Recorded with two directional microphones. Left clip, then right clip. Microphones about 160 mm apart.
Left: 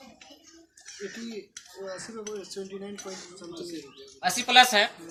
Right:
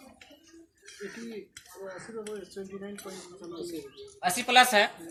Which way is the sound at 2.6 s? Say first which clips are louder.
Left 3 dB; 70° left (ahead or behind).